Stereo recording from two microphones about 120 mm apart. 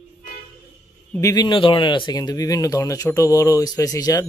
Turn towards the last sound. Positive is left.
turn(degrees=30)  # may be behind; listen again after turning